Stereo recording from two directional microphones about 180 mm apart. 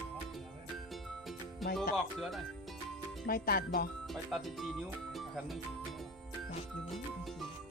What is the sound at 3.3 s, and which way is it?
Speech, 55° left (ahead or behind).